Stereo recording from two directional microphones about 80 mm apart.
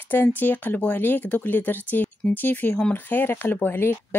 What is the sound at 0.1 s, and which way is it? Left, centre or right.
Speech, left.